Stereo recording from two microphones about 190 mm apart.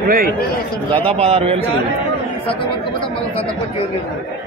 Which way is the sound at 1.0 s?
30° right (ahead or behind).